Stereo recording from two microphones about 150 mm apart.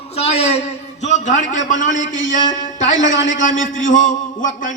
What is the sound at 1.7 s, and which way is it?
A man's voice, 55° left (ahead or behind).